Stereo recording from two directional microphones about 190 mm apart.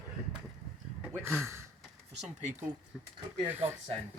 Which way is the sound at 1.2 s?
Centre (ahead or behind).